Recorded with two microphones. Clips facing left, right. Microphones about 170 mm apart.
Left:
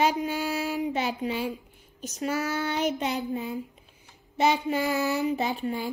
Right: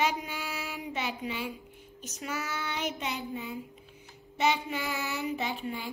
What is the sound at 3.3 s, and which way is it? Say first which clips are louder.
Speech: left 6 dB; 40° left (ahead or behind).